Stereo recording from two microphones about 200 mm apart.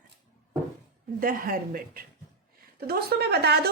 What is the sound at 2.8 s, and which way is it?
Speech, 50° right (ahead or behind).